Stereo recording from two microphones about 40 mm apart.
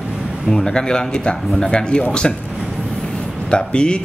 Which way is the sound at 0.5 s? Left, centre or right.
Centre.